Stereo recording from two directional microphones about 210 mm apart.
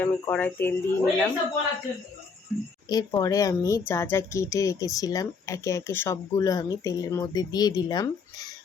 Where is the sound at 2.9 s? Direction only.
20° left (ahead or behind).